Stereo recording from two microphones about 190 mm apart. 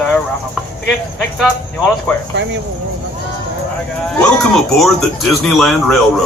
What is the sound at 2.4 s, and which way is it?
Speech, 65° right (ahead or behind).